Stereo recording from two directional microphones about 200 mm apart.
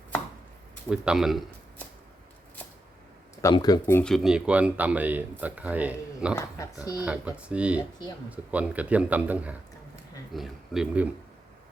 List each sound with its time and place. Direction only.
0.9 s speech: 5° right (ahead or behind)
3.4 s speech: 20° left (ahead or behind)
4.1 s speech: centre (ahead or behind)
6.3 s speech: 15° left (ahead or behind)
7.0 s speech: 5° right (ahead or behind)